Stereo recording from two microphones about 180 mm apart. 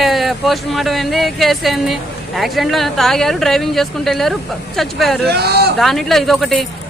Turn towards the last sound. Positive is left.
turn(degrees=0)  # may be behind; listen again after turning